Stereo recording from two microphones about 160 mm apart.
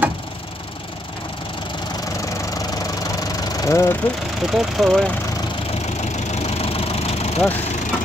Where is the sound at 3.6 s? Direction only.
20° left (ahead or behind).